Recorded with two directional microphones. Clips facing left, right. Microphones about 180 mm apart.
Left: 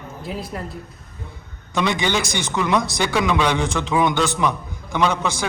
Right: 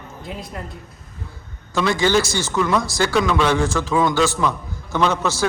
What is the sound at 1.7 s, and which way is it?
A man's voice, 20° left (ahead or behind).